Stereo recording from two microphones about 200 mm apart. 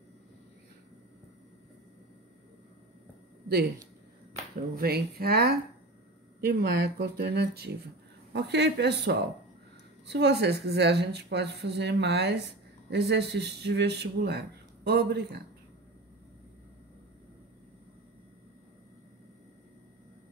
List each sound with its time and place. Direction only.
4.7 s a woman's voice: 50° right (ahead or behind)